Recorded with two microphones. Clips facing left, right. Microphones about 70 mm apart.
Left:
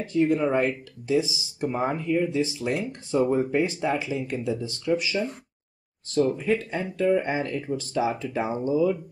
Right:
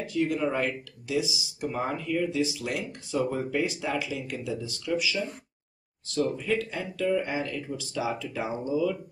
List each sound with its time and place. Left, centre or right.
0.0 s speech: left
6.2 s speech: left